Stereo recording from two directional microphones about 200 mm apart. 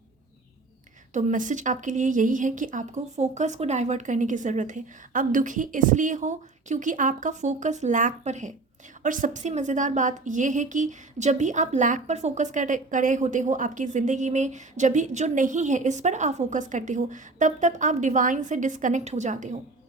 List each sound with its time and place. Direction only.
1.1 s a woman's voice: 40° right (ahead or behind)